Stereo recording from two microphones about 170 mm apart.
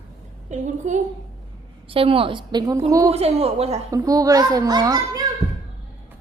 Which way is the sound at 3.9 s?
20° right (ahead or behind).